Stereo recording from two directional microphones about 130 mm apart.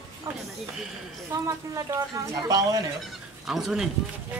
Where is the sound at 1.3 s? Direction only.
25° right (ahead or behind).